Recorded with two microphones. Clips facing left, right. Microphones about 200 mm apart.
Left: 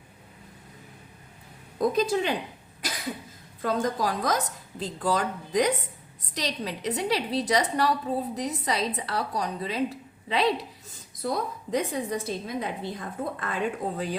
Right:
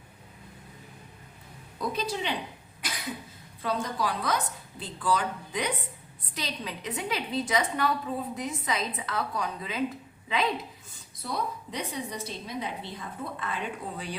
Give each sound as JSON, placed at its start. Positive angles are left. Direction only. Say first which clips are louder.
{"t": 1.8, "sound": "a woman's voice", "louder": "left 7 dB", "side_deg": 45}
{"t": 3.6, "sound": "a woman's voice", "louder": "left 4 dB", "side_deg": 45}
{"t": 11.2, "sound": "a woman's voice", "louder": "left 4 dB", "side_deg": 45}